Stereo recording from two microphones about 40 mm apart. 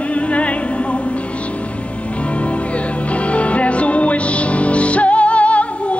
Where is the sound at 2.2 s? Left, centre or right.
Left.